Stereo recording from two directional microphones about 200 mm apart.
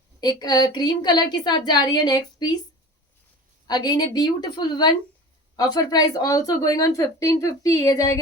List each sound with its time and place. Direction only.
0.2 s a woman's voice: 20° left (ahead or behind)
3.7 s a woman's voice: 20° left (ahead or behind)